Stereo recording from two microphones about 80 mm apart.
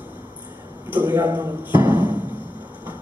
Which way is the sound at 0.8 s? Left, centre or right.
Right.